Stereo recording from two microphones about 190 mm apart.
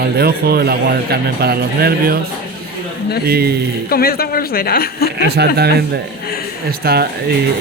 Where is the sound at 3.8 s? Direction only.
50° left (ahead or behind).